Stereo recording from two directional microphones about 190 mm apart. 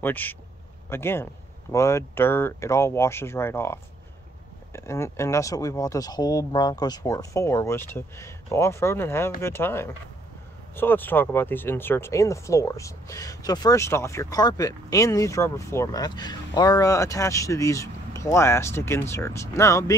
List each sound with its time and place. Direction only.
0.0 s speech: 10° left (ahead or behind)